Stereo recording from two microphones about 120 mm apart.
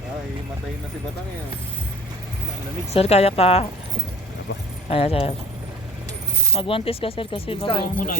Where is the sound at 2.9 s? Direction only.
60° left (ahead or behind).